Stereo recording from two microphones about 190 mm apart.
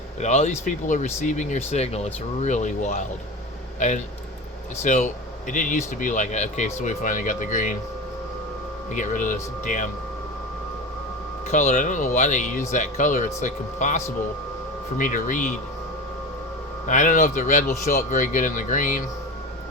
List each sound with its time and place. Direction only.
0.2 s speech: 40° left (ahead or behind)
8.9 s speech: 40° left (ahead or behind)
11.4 s speech: 40° left (ahead or behind)
16.8 s speech: 40° left (ahead or behind)